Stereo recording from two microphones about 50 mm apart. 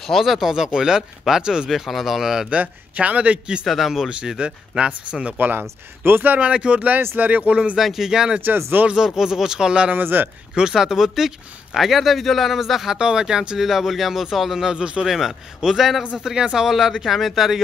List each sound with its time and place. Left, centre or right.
0.0 s speech: centre
2.5 s speech: right
3.6 s a man's voice: centre
4.1 s speech: right
5.4 s speech: right
6.4 s speech: right
7.7 s speech: centre
9.9 s a man's voice: right
10.5 s speech: centre
15.0 s a man's voice: centre
16.0 s speech: centre